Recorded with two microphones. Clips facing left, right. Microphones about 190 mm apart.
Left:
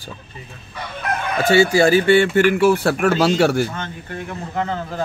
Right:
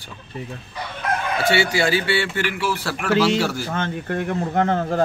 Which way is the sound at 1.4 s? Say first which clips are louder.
Left 7 dB; 45° left (ahead or behind).